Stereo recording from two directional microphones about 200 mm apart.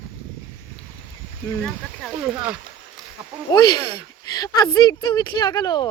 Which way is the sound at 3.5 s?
20° left (ahead or behind).